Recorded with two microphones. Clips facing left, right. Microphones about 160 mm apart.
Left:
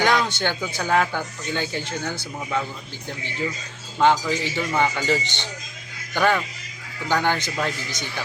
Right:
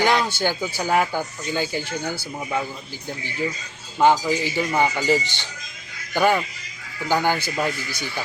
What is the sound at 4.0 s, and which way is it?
A man's voice, 10° right (ahead or behind).